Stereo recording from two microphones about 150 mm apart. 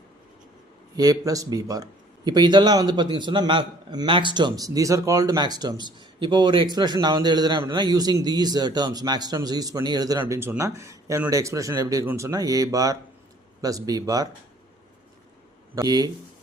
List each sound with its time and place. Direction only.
0.9 s speech: 25° right (ahead or behind)
15.7 s speech: 25° right (ahead or behind)